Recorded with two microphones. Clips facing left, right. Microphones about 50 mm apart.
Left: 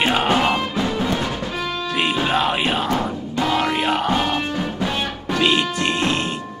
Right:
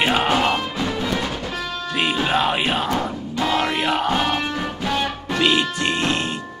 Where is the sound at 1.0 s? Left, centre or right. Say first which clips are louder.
Left 1 dB; left.